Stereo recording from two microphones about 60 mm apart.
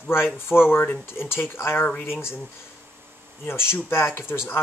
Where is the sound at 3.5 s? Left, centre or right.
Left.